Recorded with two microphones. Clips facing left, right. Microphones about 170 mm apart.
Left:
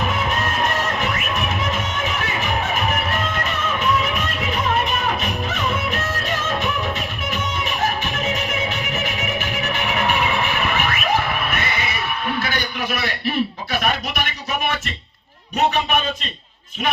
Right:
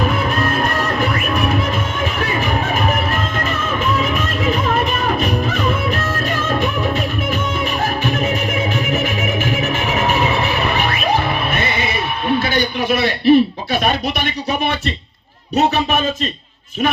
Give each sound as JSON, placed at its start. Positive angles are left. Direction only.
{"t": 8.9, "sound": "music", "side_deg": -50}